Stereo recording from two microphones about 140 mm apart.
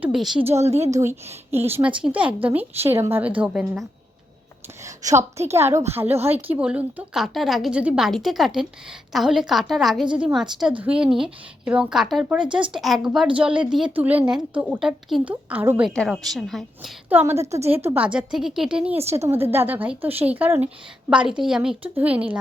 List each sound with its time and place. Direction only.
0.0 s a woman's voice: 5° right (ahead or behind)
0.6 s a woman's voice: 50° right (ahead or behind)
0.9 s a woman's voice: 25° right (ahead or behind); by 3.8 s 5° right (ahead or behind)
5.5 s a woman's voice: 20° right (ahead or behind)
12.5 s speech: 35° right (ahead or behind)
12.7 s a woman's voice: centre (ahead or behind)
16.0 s a woman's voice: centre (ahead or behind)
17.1 s a woman's voice: 15° right (ahead or behind)
19.1 s a woman's voice: 20° right (ahead or behind)